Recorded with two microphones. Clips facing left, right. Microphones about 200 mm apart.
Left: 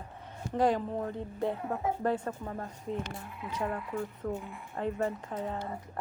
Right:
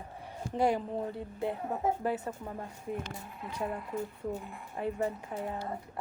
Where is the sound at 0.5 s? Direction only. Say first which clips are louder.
Left 1 dB; 10° right (ahead or behind).